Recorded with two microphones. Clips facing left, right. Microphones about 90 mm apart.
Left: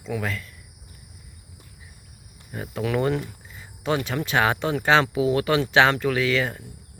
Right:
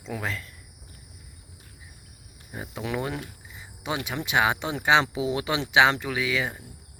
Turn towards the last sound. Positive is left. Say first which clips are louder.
# left 5 dB
turn(degrees=-10)  # may be behind; listen again after turning